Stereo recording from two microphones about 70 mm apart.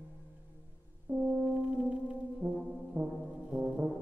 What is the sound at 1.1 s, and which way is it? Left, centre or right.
Brass instrument, right.